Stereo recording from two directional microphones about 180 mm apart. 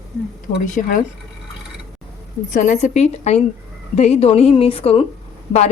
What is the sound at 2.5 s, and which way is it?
A woman's voice, 45° left (ahead or behind).